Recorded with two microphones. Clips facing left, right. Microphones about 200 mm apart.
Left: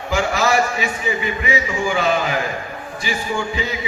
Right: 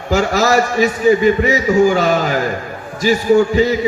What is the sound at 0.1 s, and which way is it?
A man's voice, 40° right (ahead or behind).